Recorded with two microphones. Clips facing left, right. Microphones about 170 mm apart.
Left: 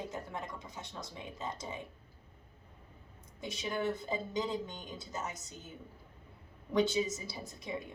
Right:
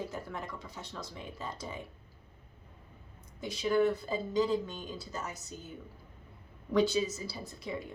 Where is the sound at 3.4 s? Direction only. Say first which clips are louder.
Right 8 dB; 20° left (ahead or behind).